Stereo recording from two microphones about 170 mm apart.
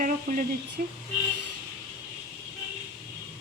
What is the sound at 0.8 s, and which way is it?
Speech, 55° right (ahead or behind).